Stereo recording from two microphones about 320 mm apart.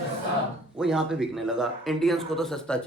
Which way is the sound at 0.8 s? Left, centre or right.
Centre.